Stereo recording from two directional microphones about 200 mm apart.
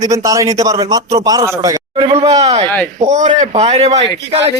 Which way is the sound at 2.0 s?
30° right (ahead or behind).